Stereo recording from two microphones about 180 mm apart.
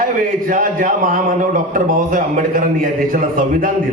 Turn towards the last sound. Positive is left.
turn(degrees=-50)  # may be behind; listen again after turning